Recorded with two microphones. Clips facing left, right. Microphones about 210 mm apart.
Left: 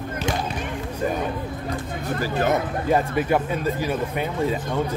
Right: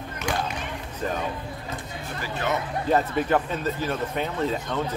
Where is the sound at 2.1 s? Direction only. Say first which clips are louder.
Left 6 dB; 40° left (ahead or behind).